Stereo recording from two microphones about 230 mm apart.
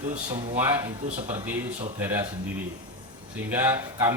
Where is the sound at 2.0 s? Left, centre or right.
Centre.